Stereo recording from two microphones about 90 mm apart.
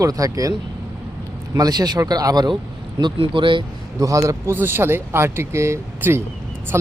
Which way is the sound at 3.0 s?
65° right (ahead or behind).